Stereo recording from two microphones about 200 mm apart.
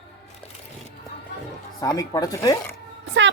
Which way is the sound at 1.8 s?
20° left (ahead or behind).